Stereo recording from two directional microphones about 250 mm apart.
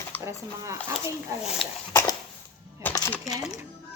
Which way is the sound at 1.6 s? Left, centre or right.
Centre.